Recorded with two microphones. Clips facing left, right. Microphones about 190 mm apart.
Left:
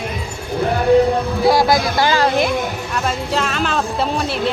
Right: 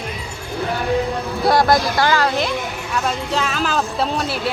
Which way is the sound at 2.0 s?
25° left (ahead or behind).